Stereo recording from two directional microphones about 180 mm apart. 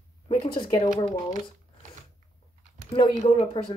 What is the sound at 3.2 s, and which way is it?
Speech, 30° left (ahead or behind).